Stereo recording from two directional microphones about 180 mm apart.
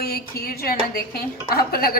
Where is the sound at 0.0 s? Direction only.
60° left (ahead or behind).